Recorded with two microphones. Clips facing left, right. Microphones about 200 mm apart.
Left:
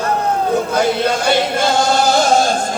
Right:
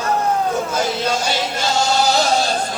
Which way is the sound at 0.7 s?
60° left (ahead or behind).